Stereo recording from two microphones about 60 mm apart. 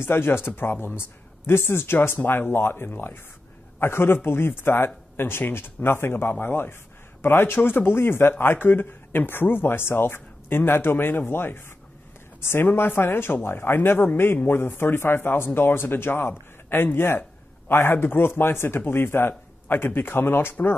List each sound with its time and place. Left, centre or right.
0.0 s speech: left